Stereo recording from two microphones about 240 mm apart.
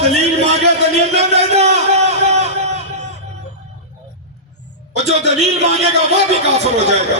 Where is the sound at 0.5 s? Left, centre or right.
Right.